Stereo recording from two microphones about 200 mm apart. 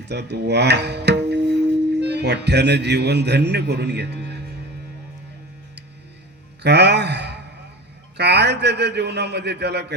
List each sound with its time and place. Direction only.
0.0 s speech: 55° right (ahead or behind)
6.6 s a sound: 55° right (ahead or behind)
8.1 s a man's voice: 55° right (ahead or behind)